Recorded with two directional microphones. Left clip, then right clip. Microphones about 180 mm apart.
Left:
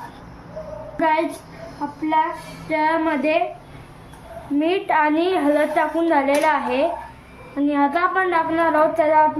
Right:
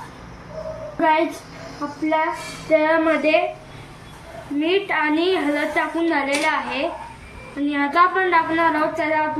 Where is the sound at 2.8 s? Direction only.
65° left (ahead or behind).